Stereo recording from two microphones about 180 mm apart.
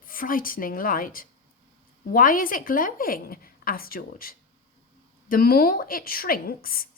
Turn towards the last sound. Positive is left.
turn(degrees=55)  # may be behind; listen again after turning